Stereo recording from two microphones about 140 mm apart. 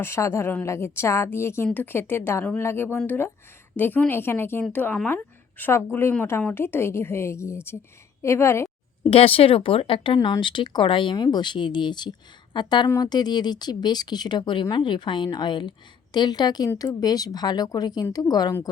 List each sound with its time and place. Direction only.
0.0 s a woman's voice: 20° left (ahead or behind)
9.0 s speech: 45° left (ahead or behind)
10.2 s speech: 30° left (ahead or behind)